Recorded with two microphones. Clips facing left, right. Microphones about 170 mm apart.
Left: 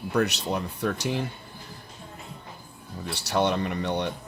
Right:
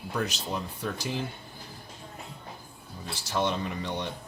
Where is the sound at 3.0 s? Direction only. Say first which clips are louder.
Left 4 dB; 70° left (ahead or behind).